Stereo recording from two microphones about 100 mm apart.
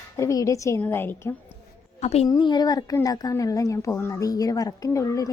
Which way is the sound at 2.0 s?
90° left.